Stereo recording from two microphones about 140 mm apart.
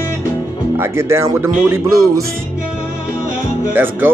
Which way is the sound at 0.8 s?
20° right (ahead or behind).